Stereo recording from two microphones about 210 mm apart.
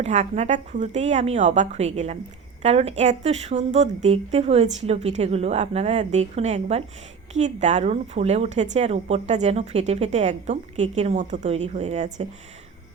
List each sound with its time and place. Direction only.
0.0 s a woman's voice: 30° right (ahead or behind)